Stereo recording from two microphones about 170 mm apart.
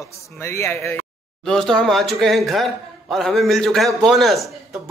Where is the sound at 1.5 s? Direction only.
5° left (ahead or behind).